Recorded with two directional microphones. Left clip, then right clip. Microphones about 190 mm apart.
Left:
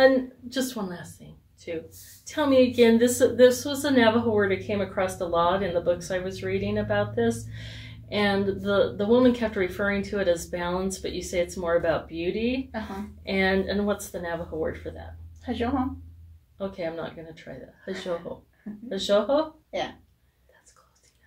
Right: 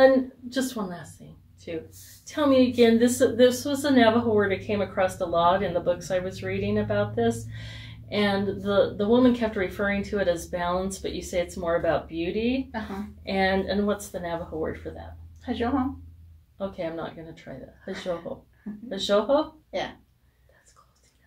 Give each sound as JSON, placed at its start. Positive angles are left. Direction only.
{"t": 0.0, "sound": "a woman's voice", "side_deg": 15}
{"t": 15.4, "sound": "a woman's voice", "side_deg": -10}
{"t": 16.5, "sound": "a woman's voice", "side_deg": 15}
{"t": 18.9, "sound": "a woman's voice", "side_deg": 15}
{"t": 19.7, "sound": "speech", "side_deg": -10}